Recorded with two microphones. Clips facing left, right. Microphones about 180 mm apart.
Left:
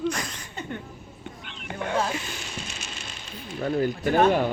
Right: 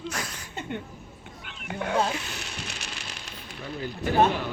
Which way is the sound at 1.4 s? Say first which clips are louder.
Even; 5° right (ahead or behind).